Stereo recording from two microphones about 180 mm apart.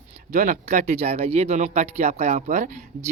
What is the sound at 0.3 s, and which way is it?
Speech, 45° right (ahead or behind).